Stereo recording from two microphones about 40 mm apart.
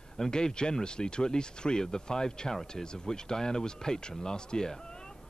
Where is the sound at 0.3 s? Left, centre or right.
Centre.